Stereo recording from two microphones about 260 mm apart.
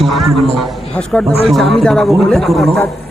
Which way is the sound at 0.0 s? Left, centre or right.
Centre.